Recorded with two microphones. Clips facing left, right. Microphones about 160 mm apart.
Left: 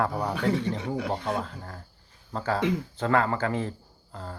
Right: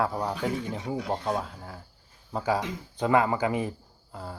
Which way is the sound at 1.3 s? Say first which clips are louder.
Even; 5° right (ahead or behind).